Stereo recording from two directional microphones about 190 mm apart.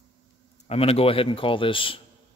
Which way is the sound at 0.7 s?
30° left (ahead or behind).